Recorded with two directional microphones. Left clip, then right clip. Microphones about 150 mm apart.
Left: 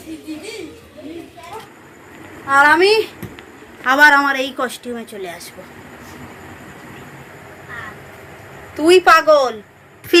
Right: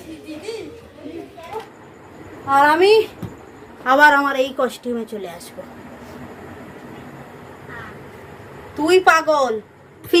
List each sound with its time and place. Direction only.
2.5 s a woman's voice: 5° right (ahead or behind)
8.8 s a woman's voice: centre (ahead or behind)